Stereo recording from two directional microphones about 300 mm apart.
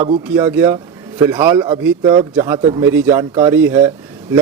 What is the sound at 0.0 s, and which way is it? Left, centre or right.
A man's voice, centre.